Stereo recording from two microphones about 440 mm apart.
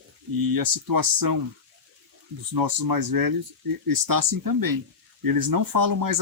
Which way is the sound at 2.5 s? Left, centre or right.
Right.